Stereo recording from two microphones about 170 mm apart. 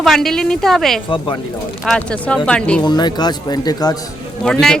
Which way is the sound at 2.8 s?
25° left (ahead or behind).